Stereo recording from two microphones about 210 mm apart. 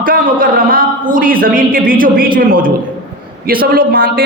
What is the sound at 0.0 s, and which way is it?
A man's voice, 40° right (ahead or behind).